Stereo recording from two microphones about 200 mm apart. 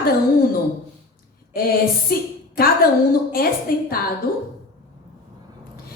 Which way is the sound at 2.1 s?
45° left (ahead or behind).